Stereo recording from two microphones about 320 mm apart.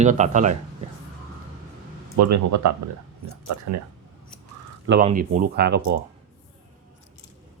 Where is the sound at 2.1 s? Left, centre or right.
Right.